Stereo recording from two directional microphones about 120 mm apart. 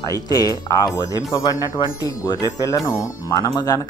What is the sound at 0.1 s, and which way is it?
Speech, 30° left (ahead or behind).